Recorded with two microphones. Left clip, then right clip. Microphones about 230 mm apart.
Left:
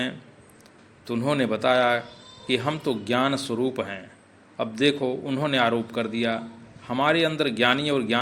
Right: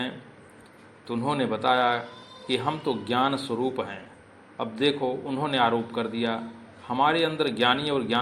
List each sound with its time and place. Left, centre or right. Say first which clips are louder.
1.0 s a man's voice: left 2 dB; left